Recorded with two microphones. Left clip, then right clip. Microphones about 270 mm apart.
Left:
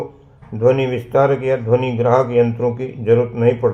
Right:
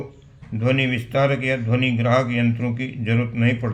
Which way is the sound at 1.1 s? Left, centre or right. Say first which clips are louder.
Left 7 dB; right.